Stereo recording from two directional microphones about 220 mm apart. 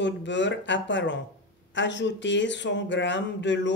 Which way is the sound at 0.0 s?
55° left (ahead or behind).